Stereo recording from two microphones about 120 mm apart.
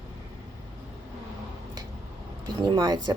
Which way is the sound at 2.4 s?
35° right (ahead or behind).